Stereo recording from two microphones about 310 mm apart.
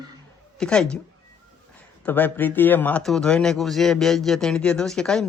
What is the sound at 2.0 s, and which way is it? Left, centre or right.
A man's voice, centre.